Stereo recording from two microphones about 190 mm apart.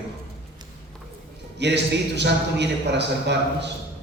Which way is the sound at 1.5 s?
65° right (ahead or behind).